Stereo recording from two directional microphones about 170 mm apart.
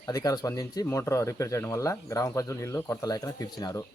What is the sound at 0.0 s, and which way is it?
Speech, 20° left (ahead or behind).